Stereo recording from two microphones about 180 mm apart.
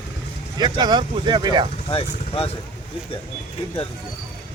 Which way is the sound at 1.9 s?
30° left (ahead or behind).